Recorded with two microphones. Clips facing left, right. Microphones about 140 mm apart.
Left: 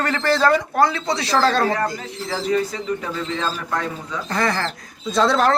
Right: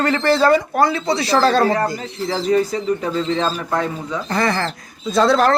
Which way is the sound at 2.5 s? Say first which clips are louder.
Right 4 dB; 35° right (ahead or behind).